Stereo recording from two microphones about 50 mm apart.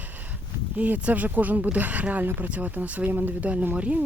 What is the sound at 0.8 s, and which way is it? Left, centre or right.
Speech, right.